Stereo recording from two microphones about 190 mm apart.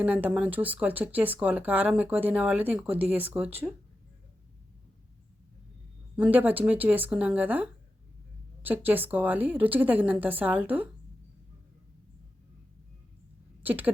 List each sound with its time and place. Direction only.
0.0 s speech: 10° right (ahead or behind)
6.1 s speech: 10° right (ahead or behind)
13.6 s speech: 10° right (ahead or behind)